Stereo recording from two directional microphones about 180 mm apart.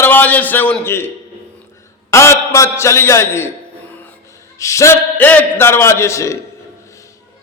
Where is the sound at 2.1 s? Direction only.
15° left (ahead or behind).